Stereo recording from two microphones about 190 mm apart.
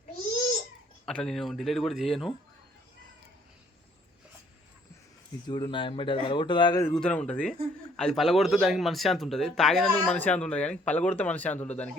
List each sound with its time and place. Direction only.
1.0 s speech: 5° left (ahead or behind)
5.5 s speech: 25° left (ahead or behind)
6.8 s speech: 5° left (ahead or behind)